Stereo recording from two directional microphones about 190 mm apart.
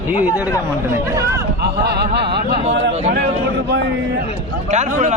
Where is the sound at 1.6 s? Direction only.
60° right (ahead or behind).